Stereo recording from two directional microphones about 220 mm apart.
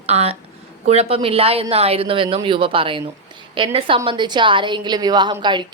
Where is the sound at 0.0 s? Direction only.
30° right (ahead or behind).